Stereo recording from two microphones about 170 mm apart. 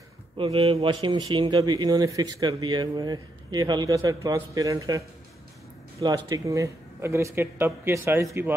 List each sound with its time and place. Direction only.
0.4 s a man's voice: 35° right (ahead or behind); by 8.5 s 15° right (ahead or behind)